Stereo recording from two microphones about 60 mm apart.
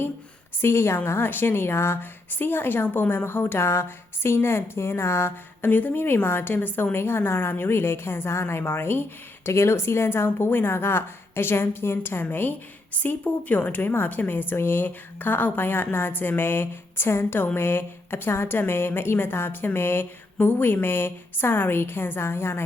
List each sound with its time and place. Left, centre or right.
0.6 s a woman's voice: left
5.7 s a woman's voice: left